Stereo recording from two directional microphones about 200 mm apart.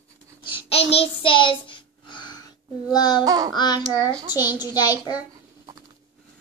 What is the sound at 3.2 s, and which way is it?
Babbling, 20° right (ahead or behind).